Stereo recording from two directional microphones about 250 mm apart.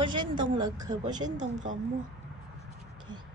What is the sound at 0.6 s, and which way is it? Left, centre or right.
Speech, centre.